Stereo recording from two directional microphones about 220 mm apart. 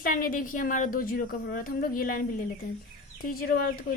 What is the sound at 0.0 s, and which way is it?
A woman's voice, 40° left (ahead or behind).